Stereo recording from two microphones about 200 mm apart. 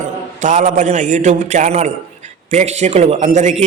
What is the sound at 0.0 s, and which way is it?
A man's voice, 35° right (ahead or behind).